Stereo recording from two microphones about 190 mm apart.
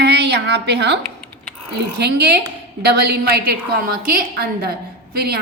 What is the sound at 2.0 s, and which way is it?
A woman's voice, 60° right (ahead or behind).